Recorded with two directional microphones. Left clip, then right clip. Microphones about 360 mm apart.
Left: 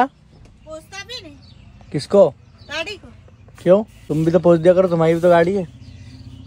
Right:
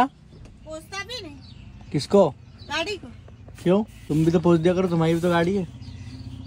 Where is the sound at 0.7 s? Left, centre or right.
Centre.